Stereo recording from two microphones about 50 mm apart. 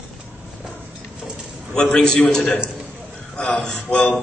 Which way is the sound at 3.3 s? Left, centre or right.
Centre.